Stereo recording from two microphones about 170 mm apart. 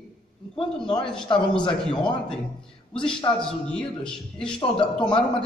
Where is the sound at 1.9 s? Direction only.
5° left (ahead or behind).